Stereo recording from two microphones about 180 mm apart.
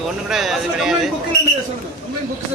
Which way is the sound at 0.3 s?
Centre (ahead or behind).